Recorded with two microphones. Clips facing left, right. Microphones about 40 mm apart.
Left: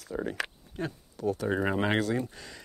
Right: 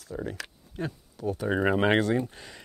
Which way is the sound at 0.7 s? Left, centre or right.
Centre.